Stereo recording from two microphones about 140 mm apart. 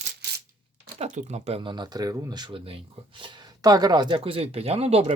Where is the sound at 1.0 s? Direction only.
55° right (ahead or behind).